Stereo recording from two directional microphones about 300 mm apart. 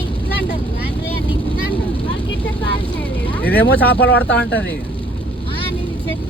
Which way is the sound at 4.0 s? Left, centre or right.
Left.